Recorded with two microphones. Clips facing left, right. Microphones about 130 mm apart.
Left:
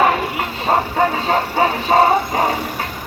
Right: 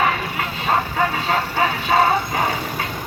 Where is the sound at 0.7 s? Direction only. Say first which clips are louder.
Left 4 dB; 35° left (ahead or behind).